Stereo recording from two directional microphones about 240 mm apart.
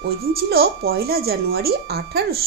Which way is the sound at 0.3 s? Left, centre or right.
Right.